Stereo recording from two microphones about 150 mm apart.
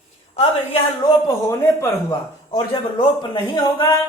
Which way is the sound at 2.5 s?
30° left (ahead or behind).